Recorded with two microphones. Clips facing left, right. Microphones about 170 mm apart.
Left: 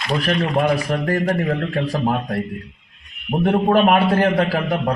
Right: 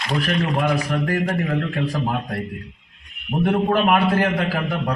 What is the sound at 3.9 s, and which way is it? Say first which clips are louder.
A man's voice: left 2 dB; 35° left (ahead or behind).